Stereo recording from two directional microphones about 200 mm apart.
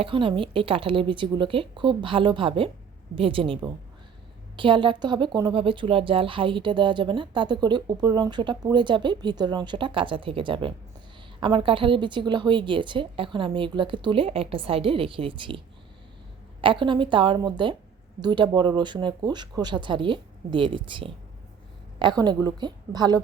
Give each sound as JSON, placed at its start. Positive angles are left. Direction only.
{"t": 0.0, "sound": "speech", "side_deg": -25}